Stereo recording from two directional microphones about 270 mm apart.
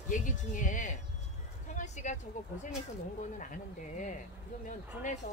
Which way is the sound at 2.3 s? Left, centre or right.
Left.